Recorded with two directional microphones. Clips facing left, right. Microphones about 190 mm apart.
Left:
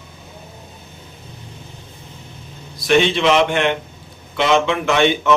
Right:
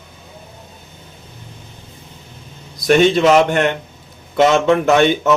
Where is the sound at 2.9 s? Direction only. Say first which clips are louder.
Right 4 dB; 45° right (ahead or behind).